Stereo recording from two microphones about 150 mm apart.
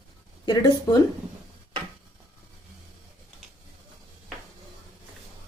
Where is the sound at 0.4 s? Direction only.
25° left (ahead or behind).